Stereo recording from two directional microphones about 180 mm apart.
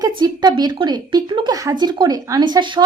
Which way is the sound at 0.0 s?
25° right (ahead or behind).